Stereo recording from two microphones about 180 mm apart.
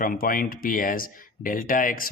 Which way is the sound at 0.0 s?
50° left (ahead or behind).